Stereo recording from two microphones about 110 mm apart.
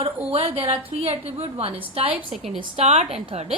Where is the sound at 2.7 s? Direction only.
75° right (ahead or behind).